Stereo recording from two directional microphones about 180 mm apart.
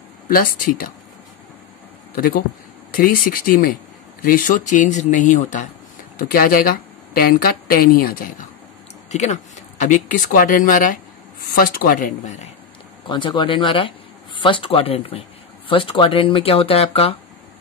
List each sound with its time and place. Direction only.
0.3 s speech: 50° left (ahead or behind)
2.1 s a woman's voice: 55° left (ahead or behind)
9.1 s speech: 40° left (ahead or behind)
13.0 s speech: 25° left (ahead or behind)